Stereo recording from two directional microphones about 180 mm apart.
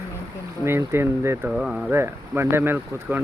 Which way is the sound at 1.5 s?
5° right (ahead or behind).